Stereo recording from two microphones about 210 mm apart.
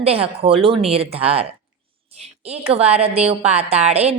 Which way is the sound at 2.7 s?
30° right (ahead or behind).